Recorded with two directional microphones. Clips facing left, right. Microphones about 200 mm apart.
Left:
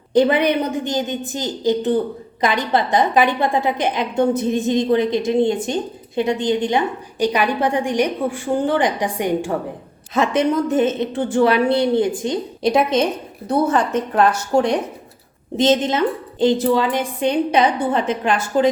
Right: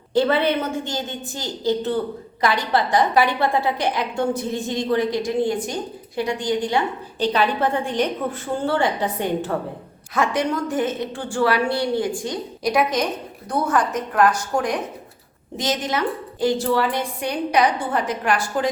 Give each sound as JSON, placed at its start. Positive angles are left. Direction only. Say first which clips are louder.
{"t": 0.1, "sound": "a woman's voice", "louder": "left 4 dB", "side_deg": 15}